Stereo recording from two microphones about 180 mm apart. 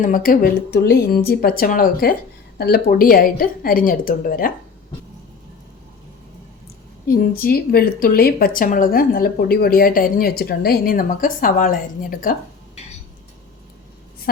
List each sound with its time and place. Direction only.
0.0 s a woman's voice: 50° left (ahead or behind)
7.1 s speech: 55° left (ahead or behind)